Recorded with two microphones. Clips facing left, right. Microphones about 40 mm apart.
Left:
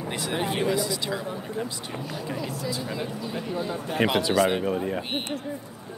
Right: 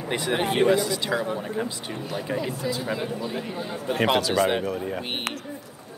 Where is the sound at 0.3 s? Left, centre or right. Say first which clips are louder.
Right 6 dB; right.